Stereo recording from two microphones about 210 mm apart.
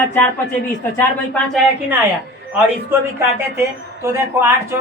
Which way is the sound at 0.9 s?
5° left (ahead or behind).